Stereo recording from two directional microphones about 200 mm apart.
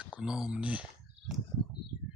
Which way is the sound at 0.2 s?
5° right (ahead or behind).